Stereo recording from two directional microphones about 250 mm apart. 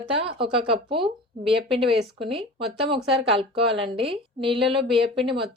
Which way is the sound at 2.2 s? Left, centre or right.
Right.